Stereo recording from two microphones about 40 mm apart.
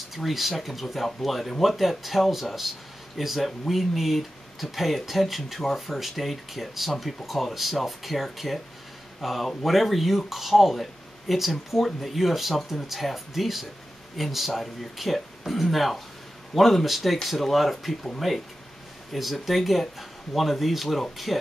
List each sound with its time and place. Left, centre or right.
0.1 s speech: centre